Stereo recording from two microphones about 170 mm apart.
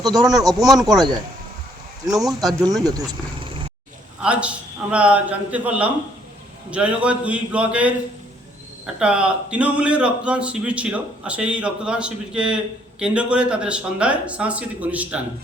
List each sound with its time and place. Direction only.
0.0 s speech: 20° right (ahead or behind)
2.0 s speech: centre (ahead or behind)
2.5 s speech: 20° right (ahead or behind)
4.2 s a man's voice: 5° right (ahead or behind)
9.0 s a man's voice: 5° right (ahead or behind)